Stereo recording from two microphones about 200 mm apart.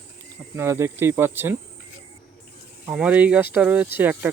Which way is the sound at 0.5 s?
15° right (ahead or behind).